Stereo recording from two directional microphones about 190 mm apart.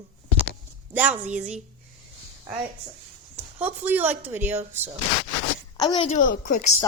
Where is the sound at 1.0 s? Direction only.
5° right (ahead or behind).